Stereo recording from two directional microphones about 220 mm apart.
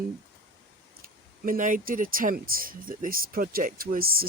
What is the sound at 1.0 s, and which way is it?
Speech, 40° right (ahead or behind).